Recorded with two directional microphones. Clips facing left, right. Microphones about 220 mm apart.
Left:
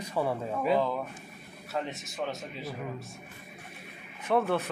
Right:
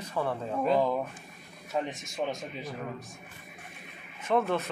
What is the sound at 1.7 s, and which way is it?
Speech, 10° right (ahead or behind).